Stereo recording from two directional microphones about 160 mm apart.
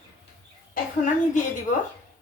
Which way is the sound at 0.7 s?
55° left (ahead or behind).